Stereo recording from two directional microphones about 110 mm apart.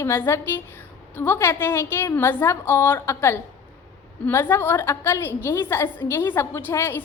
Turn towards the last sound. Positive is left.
turn(degrees=20)  # may be behind; listen again after turning